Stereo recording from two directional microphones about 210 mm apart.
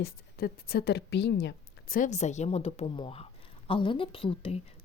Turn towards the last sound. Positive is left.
turn(degrees=25)  # may be behind; listen again after turning